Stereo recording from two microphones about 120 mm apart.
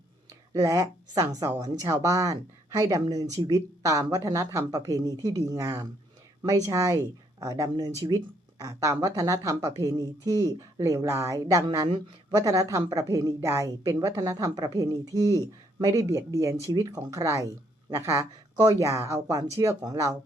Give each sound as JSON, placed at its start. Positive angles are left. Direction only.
{"t": 0.3, "sound": "a woman's voice", "side_deg": -30}